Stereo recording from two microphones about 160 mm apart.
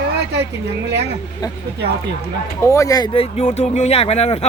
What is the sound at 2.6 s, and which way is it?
Speech, 20° left (ahead or behind).